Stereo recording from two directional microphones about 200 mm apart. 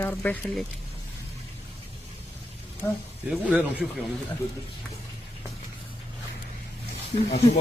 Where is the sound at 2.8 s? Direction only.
10° left (ahead or behind).